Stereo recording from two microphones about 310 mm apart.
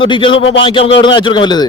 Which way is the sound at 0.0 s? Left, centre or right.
Centre.